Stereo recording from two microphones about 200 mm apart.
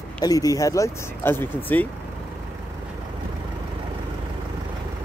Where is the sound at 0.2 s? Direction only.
20° left (ahead or behind).